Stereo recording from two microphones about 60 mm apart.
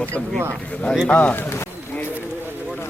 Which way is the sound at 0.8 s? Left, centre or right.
Centre.